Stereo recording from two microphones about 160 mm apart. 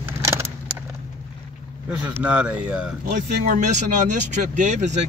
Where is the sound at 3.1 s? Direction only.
55° right (ahead or behind).